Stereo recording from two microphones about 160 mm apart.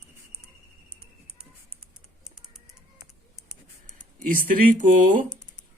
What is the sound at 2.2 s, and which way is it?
Typing, 5° right (ahead or behind).